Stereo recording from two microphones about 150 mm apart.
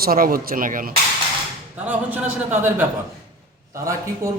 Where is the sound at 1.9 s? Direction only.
10° right (ahead or behind).